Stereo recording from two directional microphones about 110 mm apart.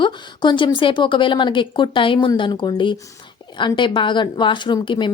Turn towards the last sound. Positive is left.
turn(degrees=45)  # may be behind; listen again after turning